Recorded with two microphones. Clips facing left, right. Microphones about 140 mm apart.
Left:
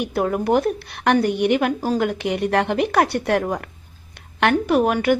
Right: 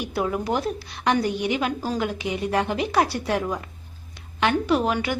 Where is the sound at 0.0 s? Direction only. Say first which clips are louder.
Left 4 dB; 55° left (ahead or behind).